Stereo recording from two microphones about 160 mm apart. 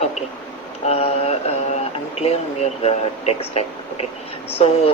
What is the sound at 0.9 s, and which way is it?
Mantra, 40° left (ahead or behind).